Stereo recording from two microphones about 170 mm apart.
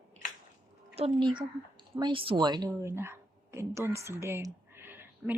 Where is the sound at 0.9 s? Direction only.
30° right (ahead or behind).